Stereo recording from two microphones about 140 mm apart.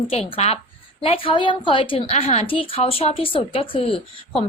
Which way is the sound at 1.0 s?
40° left (ahead or behind).